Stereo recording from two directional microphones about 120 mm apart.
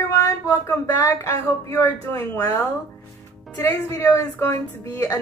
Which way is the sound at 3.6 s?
25° left (ahead or behind).